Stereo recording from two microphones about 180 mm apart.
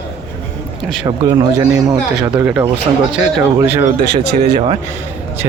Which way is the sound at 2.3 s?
5° right (ahead or behind).